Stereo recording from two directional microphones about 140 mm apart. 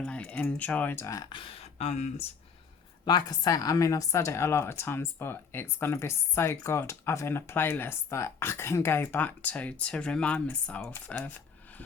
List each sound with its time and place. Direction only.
0.0 s a woman's voice: 10° left (ahead or behind); by 1.3 s 25° left (ahead or behind)
1.3 s speech: 40° left (ahead or behind)
3.1 s a woman's voice: 30° left (ahead or behind); by 11.3 s 10° left (ahead or behind)